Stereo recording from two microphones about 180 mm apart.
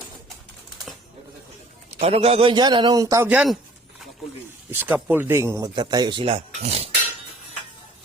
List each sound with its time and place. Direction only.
1.9 s speech: 35° right (ahead or behind); by 3.2 s 20° right (ahead or behind)
3.2 s speech: 5° right (ahead or behind)
4.7 s speech: 10° right (ahead or behind); by 6.9 s 35° right (ahead or behind)